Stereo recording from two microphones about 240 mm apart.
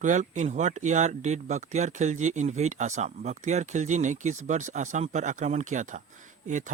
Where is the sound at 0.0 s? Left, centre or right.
Right.